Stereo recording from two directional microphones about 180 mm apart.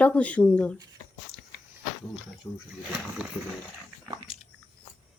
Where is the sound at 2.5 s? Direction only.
10° left (ahead or behind).